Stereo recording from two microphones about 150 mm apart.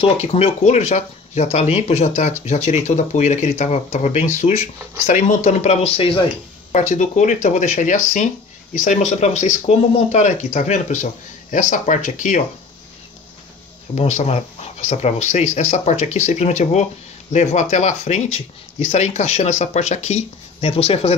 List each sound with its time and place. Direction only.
0.0 s speech: 45° left (ahead or behind)
6.7 s speech: 55° left (ahead or behind)
13.9 s speech: 45° left (ahead or behind)